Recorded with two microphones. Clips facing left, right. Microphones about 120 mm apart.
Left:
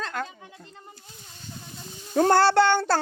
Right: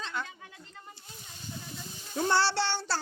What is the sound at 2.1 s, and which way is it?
Speech, 55° left (ahead or behind).